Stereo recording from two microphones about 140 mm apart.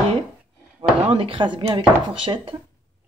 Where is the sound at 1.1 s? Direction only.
40° right (ahead or behind).